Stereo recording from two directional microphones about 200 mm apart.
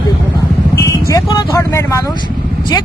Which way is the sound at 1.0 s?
15° left (ahead or behind).